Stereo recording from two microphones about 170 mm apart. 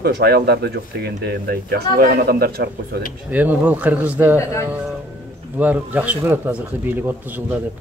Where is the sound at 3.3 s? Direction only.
10° right (ahead or behind).